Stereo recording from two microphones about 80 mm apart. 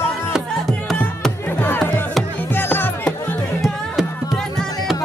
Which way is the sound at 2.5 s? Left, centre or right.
Left.